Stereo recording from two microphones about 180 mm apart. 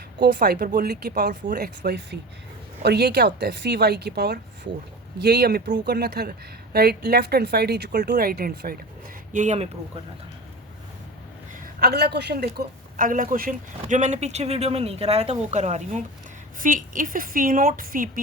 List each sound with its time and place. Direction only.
0.2 s speech: 65° right (ahead or behind)
9.3 s a woman's voice: 40° right (ahead or behind)
11.6 s a woman's voice: 60° right (ahead or behind)